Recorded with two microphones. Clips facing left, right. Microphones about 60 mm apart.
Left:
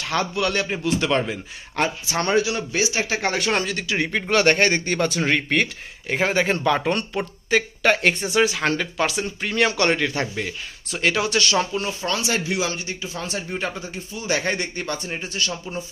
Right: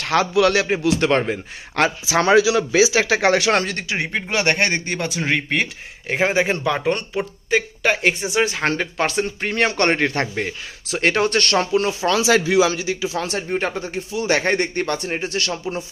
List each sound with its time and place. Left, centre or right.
0.0 s speech: right
0.8 s a man's voice: right
1.8 s speech: right
3.8 s speech: right
6.0 s speech: centre
8.4 s speech: right
11.6 s speech: right
13.4 s speech: right
13.7 s a man's voice: right